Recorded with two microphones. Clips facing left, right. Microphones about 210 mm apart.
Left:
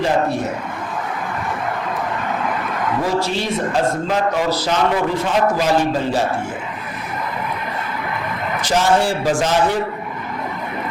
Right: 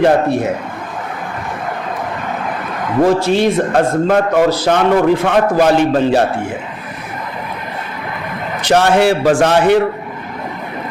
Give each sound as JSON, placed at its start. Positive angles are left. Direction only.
{"t": 3.0, "sound": "a man's voice", "side_deg": -55}
{"t": 8.6, "sound": "a man's voice", "side_deg": -65}